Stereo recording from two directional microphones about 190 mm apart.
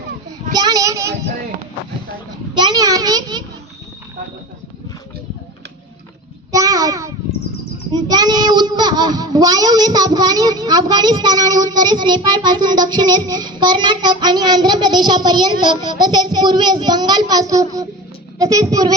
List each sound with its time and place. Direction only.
0.5 s child singing: 20° right (ahead or behind)
2.6 s a sound: 20° right (ahead or behind)
6.5 s child singing: 20° right (ahead or behind)
7.9 s a child's voice: 20° right (ahead or behind)